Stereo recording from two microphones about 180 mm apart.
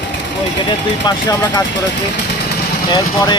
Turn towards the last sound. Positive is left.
turn(degrees=20)  # may be behind; listen again after turning